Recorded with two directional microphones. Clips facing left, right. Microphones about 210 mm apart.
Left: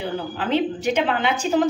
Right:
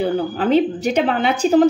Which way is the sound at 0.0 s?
40° right (ahead or behind).